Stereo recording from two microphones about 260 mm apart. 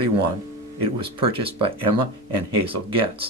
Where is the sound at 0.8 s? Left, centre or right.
Right.